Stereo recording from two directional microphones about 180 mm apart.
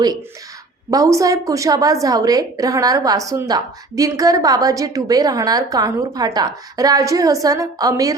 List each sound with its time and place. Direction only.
0.9 s a woman's voice: 20° right (ahead or behind)